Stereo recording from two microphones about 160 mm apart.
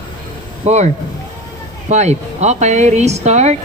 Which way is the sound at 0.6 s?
45° right (ahead or behind).